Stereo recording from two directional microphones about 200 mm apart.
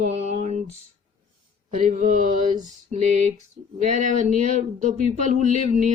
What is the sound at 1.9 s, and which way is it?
Speech, 40° right (ahead or behind).